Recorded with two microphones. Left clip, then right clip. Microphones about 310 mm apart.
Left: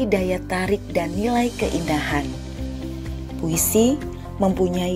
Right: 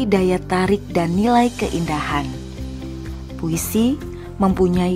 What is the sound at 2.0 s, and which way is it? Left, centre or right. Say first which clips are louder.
Speech: right 2 dB; centre.